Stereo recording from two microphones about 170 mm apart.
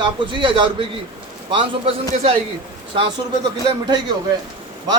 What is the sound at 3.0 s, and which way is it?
A man's voice, 25° right (ahead or behind).